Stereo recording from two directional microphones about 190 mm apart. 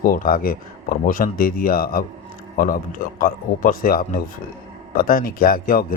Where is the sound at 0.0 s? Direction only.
50° left (ahead or behind).